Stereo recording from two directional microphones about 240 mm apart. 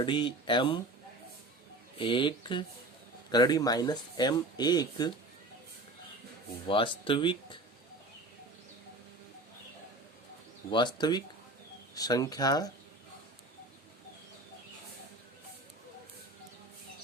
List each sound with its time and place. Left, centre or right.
0.0 s speech: centre
2.0 s speech: left
6.7 s speech: left
10.7 s speech: centre